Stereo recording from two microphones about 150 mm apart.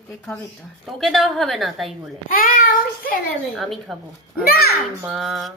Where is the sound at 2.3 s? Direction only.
70° left (ahead or behind).